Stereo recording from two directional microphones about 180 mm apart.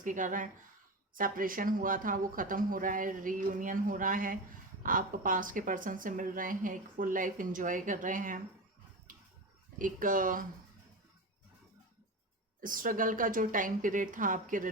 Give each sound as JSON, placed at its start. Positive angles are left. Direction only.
{"t": 0.0, "sound": "speech", "side_deg": -45}
{"t": 9.1, "sound": "a sound", "side_deg": -50}
{"t": 9.7, "sound": "speech", "side_deg": -50}
{"t": 12.5, "sound": "speech", "side_deg": -50}